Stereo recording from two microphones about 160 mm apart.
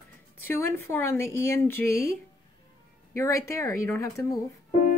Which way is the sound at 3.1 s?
20° left (ahead or behind).